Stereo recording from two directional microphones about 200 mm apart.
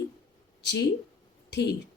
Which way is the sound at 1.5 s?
55° left (ahead or behind).